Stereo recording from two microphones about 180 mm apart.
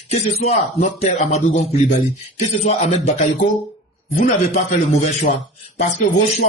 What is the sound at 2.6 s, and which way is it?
Speech, 35° left (ahead or behind).